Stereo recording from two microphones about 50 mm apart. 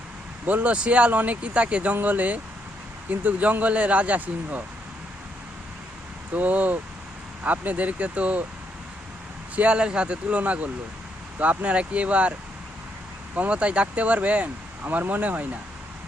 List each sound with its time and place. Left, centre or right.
0.4 s speech: right
6.3 s speech: right
9.6 s speech: right
13.3 s speech: right
14.8 s speech: right